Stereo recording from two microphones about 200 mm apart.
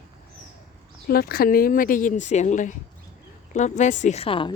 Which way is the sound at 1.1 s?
50° left (ahead or behind).